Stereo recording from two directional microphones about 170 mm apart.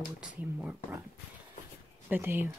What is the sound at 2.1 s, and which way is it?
Speech, 10° right (ahead or behind).